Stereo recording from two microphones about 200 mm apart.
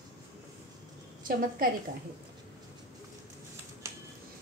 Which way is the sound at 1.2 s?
45° right (ahead or behind).